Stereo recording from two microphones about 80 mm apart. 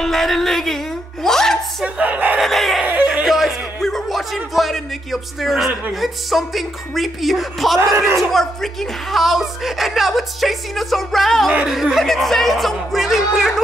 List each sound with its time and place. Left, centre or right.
0.0 s a woman's voice: centre
2.0 s speech: centre
2.4 s a woman's voice: centre
2.8 s a sound: right
3.3 s a woman's voice: centre